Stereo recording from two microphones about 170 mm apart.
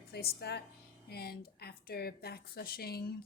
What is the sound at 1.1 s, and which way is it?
Speech, 70° left (ahead or behind).